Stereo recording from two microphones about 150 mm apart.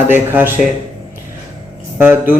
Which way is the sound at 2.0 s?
15° right (ahead or behind).